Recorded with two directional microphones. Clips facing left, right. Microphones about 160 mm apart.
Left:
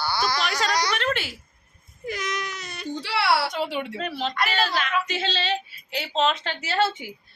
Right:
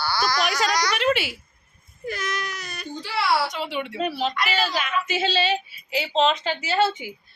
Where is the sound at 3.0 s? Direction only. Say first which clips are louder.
Even; 70° left (ahead or behind).